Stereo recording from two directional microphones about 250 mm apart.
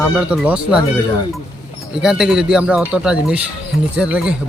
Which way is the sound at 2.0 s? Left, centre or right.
Centre.